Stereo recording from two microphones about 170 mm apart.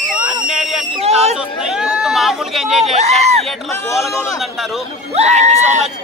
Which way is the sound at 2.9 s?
40° right (ahead or behind).